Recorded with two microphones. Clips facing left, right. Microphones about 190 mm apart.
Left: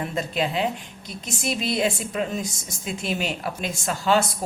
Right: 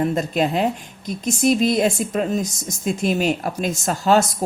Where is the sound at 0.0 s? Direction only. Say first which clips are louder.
Right 6 dB; 45° right (ahead or behind).